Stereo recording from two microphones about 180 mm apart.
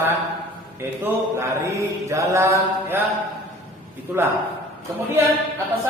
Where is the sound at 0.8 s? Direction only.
15° right (ahead or behind).